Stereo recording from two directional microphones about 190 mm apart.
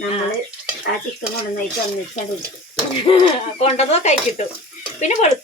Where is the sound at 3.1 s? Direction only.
30° left (ahead or behind).